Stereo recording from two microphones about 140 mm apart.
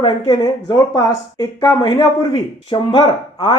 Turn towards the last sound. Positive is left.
turn(degrees=35)  # may be behind; listen again after turning